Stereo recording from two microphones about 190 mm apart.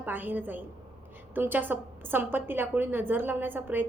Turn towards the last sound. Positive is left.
turn(degrees=-10)  # may be behind; listen again after turning